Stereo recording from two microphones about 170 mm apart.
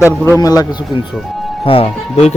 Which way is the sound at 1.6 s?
35° left (ahead or behind).